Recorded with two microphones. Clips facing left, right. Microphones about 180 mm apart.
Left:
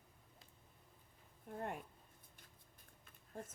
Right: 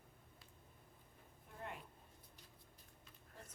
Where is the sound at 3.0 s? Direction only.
50° left (ahead or behind).